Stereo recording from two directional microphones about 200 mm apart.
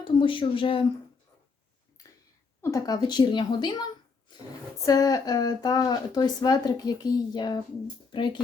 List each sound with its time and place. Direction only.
0.0 s speech: 25° left (ahead or behind)
2.6 s speech: 15° left (ahead or behind)
4.9 s speech: 20° left (ahead or behind)